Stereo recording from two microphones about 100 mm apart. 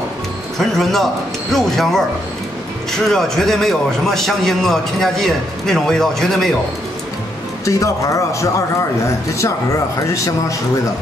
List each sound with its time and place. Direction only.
0.6 s a man's voice: 5° left (ahead or behind)
3.1 s a man's voice: 5° left (ahead or behind)
7.6 s a man's voice: 35° left (ahead or behind)